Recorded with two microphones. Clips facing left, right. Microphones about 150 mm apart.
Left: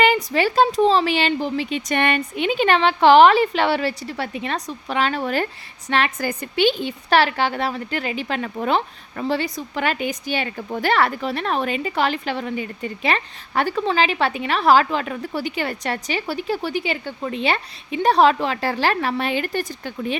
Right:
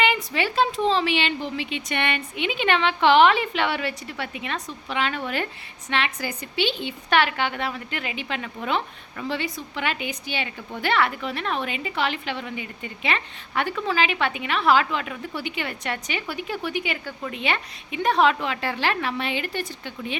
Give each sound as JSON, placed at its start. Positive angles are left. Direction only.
{"t": 0.0, "sound": "a woman's voice", "side_deg": 40}